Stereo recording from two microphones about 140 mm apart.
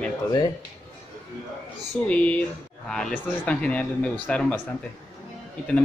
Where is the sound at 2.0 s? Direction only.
10° left (ahead or behind).